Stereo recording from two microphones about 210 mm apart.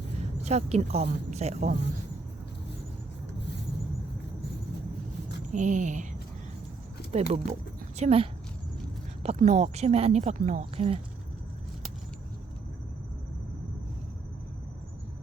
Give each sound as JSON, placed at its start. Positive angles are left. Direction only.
{"t": 0.4, "sound": "speech", "side_deg": -30}
{"t": 5.5, "sound": "speech", "side_deg": -35}
{"t": 7.1, "sound": "a woman's voice", "side_deg": -30}